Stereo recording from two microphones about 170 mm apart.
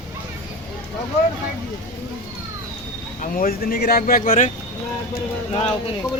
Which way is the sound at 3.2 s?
55° left (ahead or behind).